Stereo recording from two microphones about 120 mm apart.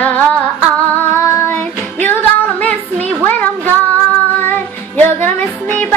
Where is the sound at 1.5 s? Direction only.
15° left (ahead or behind).